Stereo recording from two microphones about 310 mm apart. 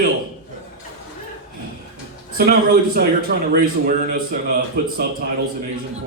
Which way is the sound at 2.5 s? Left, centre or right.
Right.